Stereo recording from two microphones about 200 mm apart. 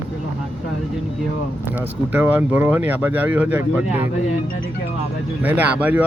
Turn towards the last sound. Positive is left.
turn(degrees=-10)  # may be behind; listen again after turning